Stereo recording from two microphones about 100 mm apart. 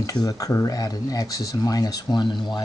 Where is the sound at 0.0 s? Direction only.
40° left (ahead or behind).